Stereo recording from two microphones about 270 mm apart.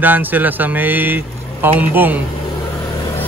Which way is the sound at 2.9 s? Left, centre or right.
Centre.